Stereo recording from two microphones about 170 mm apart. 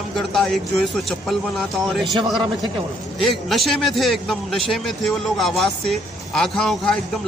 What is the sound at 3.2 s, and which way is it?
A man's voice, centre (ahead or behind).